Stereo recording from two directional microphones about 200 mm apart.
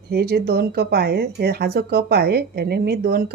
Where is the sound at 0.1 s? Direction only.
50° right (ahead or behind).